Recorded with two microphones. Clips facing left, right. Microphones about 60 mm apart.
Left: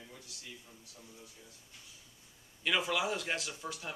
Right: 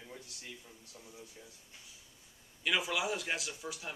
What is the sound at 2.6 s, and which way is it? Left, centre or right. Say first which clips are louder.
Speech: left 1 dB; centre.